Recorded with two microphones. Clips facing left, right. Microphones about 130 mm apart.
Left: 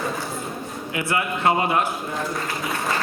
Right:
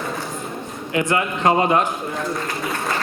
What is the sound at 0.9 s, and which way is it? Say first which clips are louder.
Speech: right 4 dB; 35° right (ahead or behind).